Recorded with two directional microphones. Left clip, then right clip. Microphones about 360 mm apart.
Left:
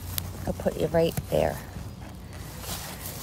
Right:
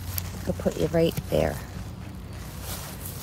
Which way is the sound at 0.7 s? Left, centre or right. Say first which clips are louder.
Even; right.